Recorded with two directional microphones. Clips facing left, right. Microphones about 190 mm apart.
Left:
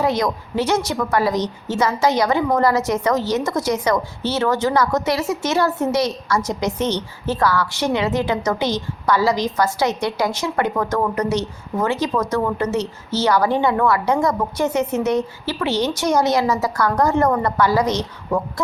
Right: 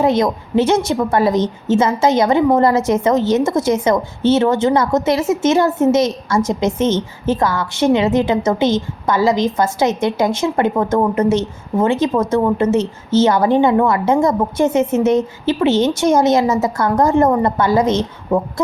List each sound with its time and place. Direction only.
0.0 s a woman's voice: 25° right (ahead or behind)